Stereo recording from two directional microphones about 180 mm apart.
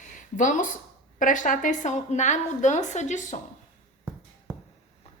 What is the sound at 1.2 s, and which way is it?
A woman's voice, 45° left (ahead or behind).